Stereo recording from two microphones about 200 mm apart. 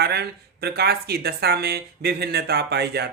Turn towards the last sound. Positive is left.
turn(degrees=-55)  # may be behind; listen again after turning